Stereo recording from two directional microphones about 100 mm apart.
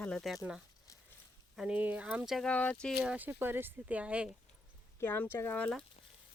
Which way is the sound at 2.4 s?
10° left (ahead or behind).